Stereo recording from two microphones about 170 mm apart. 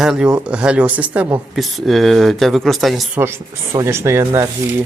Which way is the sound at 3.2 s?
15° right (ahead or behind).